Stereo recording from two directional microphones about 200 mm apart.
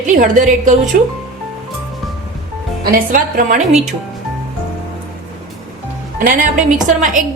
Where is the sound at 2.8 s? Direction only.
45° right (ahead or behind).